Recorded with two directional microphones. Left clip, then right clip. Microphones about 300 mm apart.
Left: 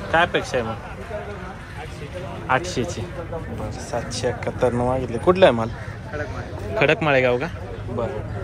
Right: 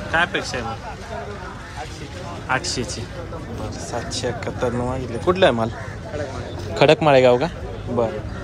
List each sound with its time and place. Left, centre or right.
0.1 s speech: centre
2.4 s speech: centre
3.9 s speech: centre
6.8 s a man's voice: centre